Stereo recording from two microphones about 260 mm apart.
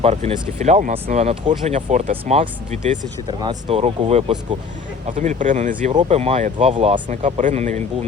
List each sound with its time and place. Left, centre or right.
0.0 s speech: right